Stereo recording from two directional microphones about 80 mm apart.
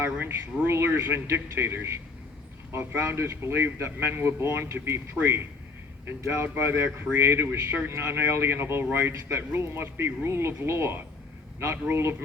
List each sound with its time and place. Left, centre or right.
0.0 s speech: right